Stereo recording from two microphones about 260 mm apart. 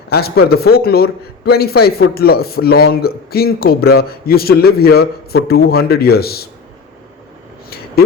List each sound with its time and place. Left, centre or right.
0.1 s a man's voice: left